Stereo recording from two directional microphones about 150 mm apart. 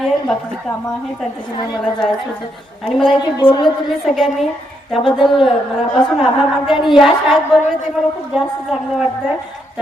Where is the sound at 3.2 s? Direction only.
30° left (ahead or behind).